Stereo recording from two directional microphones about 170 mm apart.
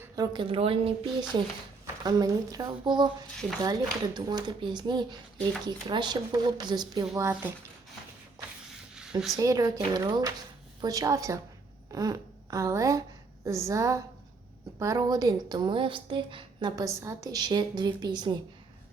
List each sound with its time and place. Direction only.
0.0 s a woman's voice: 25° right (ahead or behind)
2.0 s a woman's voice: 20° right (ahead or behind)
9.3 s a woman's voice: 20° right (ahead or behind)